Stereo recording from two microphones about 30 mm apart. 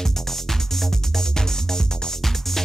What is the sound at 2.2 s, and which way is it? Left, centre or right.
Music, centre.